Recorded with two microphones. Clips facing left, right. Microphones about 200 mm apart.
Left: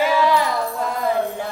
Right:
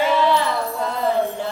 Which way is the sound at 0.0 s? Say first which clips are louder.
Even; 10° left (ahead or behind).